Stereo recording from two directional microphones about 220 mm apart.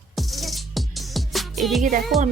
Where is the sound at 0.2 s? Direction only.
Centre (ahead or behind).